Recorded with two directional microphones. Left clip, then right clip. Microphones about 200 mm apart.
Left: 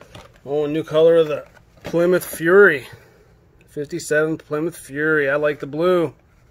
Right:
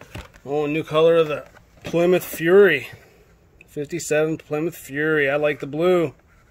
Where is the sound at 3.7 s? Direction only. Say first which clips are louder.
Left 2 dB; 10° right (ahead or behind).